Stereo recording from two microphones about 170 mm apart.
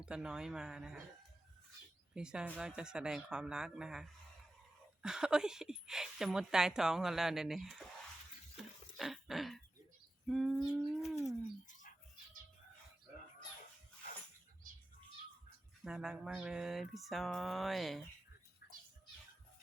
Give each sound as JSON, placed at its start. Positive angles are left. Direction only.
{"t": 0.0, "sound": "a woman's voice", "side_deg": -5}
{"t": 2.1, "sound": "a woman's voice", "side_deg": -5}
{"t": 9.0, "sound": "a sound", "side_deg": 0}
{"t": 10.2, "sound": "a woman's voice", "side_deg": 0}
{"t": 11.3, "sound": "bird", "side_deg": 45}
{"t": 15.8, "sound": "a woman's voice", "side_deg": -5}
{"t": 18.6, "sound": "music", "side_deg": 65}